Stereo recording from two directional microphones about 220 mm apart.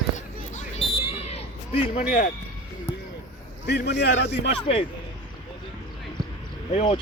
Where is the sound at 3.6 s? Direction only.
50° left (ahead or behind).